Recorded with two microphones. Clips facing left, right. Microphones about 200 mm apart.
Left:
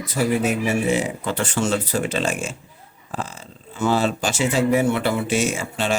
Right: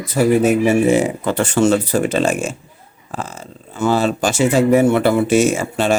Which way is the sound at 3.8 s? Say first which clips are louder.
Right 4 dB; 50° right (ahead or behind).